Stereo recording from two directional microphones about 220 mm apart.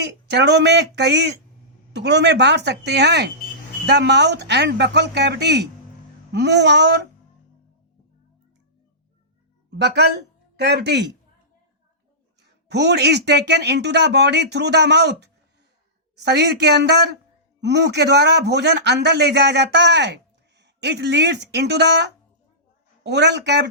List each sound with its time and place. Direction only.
0.0 s speech: 50° right (ahead or behind)
9.6 s speech: 50° right (ahead or behind)
12.4 s speech: 50° right (ahead or behind)